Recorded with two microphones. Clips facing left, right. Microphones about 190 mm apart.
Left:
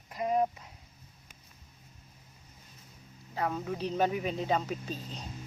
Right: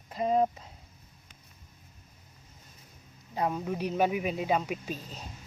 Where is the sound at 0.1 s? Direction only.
25° right (ahead or behind).